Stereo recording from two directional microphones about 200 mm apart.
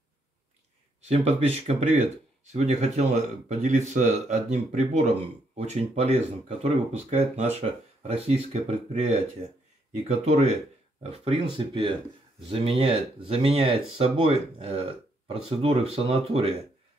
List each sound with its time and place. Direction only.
1.0 s speech: 30° right (ahead or behind)